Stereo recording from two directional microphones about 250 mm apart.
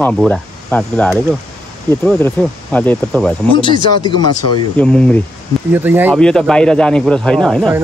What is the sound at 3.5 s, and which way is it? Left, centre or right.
Speech, centre.